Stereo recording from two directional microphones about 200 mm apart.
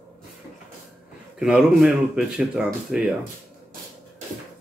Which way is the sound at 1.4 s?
5° right (ahead or behind).